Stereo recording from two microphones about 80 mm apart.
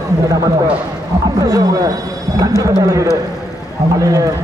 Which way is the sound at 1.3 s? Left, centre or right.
Right.